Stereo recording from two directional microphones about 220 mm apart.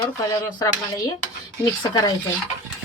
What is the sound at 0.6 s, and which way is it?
Speech, 15° left (ahead or behind).